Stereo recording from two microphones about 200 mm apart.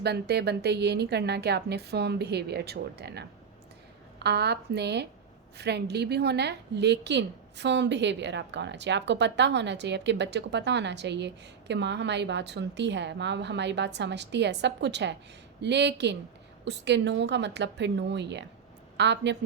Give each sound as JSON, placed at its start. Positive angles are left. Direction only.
{"t": 0.0, "sound": "a woman's voice", "side_deg": -55}